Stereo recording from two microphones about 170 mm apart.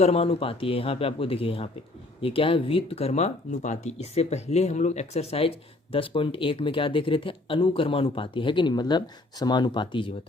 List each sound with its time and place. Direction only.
0.0 s speech: 35° left (ahead or behind)